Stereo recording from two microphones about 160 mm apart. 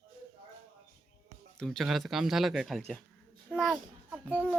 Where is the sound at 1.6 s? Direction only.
Centre (ahead or behind).